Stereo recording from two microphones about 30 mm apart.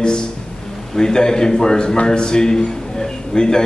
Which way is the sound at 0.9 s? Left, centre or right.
Left.